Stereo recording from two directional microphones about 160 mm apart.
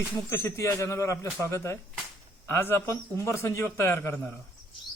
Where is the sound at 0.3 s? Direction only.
15° left (ahead or behind).